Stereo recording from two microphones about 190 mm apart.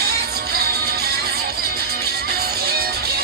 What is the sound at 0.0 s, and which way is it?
Music, 55° right (ahead or behind).